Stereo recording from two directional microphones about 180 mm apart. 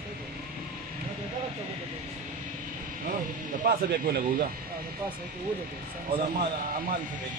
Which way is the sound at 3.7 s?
55° right (ahead or behind).